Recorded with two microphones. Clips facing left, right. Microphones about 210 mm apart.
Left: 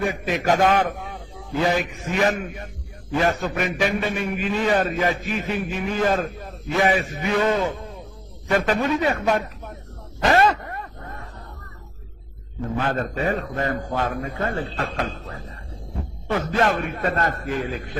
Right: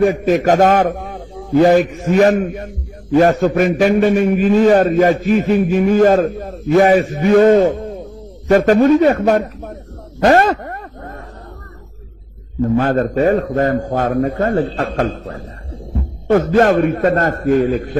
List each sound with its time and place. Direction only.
0.0 s a man's voice: 45° right (ahead or behind)
10.2 s a sound: 50° right (ahead or behind)
12.7 s a man's voice: 45° right (ahead or behind)